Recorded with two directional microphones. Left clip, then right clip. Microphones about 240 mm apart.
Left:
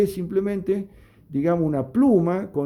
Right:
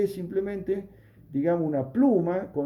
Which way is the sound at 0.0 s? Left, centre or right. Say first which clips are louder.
Left 5 dB; left.